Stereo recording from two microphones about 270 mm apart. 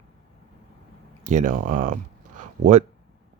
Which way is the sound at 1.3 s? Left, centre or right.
Right.